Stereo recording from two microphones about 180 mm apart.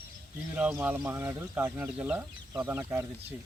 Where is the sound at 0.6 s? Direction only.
10° right (ahead or behind).